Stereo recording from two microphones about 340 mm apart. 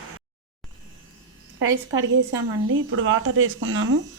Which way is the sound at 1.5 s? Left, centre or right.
Right.